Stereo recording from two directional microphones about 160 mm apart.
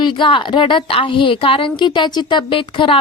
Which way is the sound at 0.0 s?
30° left (ahead or behind).